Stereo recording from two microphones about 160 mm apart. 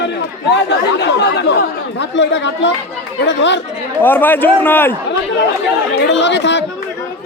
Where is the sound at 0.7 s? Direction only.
90° left.